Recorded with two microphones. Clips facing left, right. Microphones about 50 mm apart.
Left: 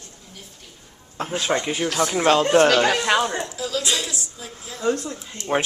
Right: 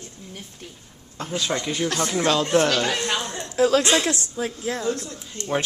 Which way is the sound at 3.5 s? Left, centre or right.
Right.